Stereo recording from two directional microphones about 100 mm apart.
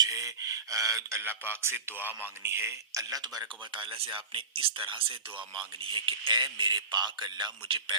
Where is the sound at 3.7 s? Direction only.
55° right (ahead or behind).